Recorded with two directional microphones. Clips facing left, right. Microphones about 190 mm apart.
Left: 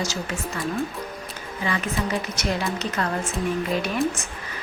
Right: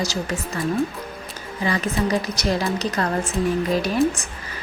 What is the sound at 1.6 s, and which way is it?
A woman's voice, 35° right (ahead or behind).